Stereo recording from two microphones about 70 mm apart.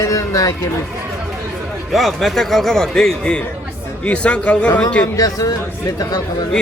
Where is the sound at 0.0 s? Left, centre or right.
Left.